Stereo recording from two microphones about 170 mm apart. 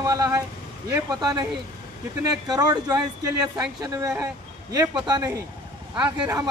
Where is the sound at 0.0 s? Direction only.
20° right (ahead or behind).